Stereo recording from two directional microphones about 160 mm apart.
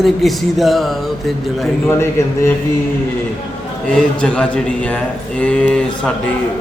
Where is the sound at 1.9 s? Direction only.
15° left (ahead or behind).